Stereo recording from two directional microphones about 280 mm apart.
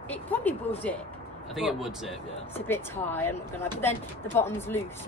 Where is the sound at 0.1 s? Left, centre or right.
Centre.